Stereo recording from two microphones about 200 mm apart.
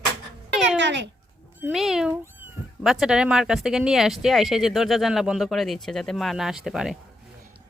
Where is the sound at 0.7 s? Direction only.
60° right (ahead or behind).